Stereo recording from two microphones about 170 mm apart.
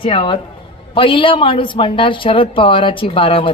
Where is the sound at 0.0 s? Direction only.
30° left (ahead or behind).